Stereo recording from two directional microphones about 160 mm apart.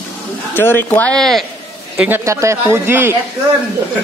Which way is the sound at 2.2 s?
20° right (ahead or behind).